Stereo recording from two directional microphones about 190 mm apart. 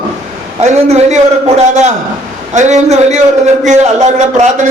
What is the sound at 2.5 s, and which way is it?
A man's voice, 40° right (ahead or behind).